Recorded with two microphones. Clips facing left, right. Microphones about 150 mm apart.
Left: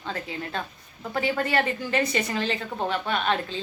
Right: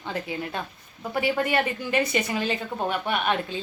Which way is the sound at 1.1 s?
15° right (ahead or behind).